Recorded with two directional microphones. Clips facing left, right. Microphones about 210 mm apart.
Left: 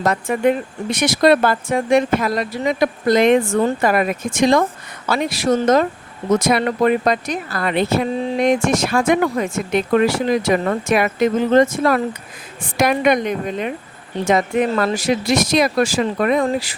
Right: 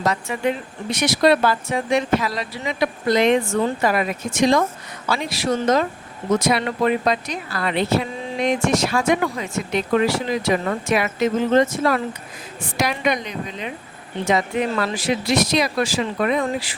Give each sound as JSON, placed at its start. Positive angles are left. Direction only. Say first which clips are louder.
{"t": 0.0, "sound": "speech", "louder": "left 5 dB", "side_deg": 50}